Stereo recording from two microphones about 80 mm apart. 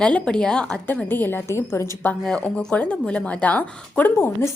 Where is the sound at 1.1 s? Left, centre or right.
Left.